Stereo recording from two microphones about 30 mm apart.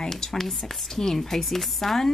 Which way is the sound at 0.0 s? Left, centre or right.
Left.